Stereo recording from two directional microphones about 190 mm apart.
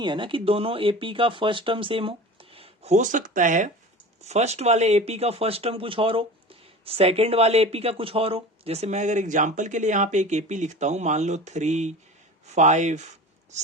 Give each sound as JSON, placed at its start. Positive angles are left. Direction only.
{"t": 0.0, "sound": "speech", "side_deg": -25}